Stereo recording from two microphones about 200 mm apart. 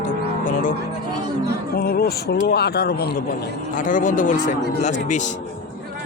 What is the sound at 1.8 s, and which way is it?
A man's voice, 50° left (ahead or behind).